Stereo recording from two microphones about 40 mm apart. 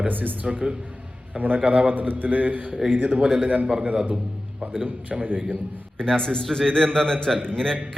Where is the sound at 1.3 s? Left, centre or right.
Right.